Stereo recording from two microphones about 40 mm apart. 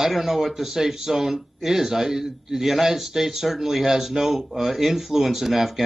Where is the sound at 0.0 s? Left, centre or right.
Centre.